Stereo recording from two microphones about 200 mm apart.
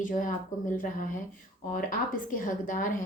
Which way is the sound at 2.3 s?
40° left (ahead or behind).